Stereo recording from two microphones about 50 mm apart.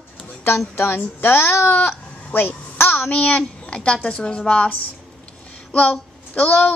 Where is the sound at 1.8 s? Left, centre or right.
Left.